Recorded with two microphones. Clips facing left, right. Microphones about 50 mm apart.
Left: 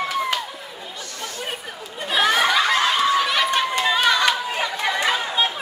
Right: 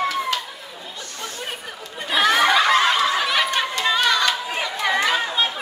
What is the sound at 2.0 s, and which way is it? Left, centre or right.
Snicker, centre.